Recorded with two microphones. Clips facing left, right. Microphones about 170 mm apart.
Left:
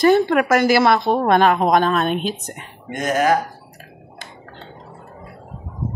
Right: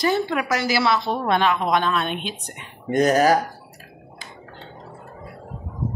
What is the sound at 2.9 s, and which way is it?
Speech, 40° right (ahead or behind).